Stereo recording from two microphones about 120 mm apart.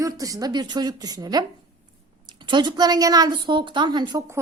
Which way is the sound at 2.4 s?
40° right (ahead or behind).